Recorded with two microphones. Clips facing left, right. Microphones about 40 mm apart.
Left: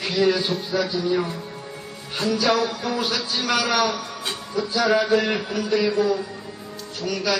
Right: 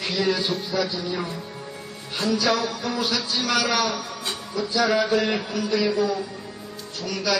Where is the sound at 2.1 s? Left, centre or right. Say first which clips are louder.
Left 1 dB; centre.